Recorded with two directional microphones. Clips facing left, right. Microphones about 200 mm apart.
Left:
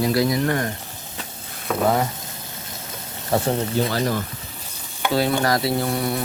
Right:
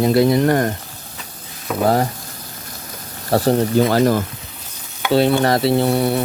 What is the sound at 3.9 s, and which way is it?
Speech, 45° right (ahead or behind).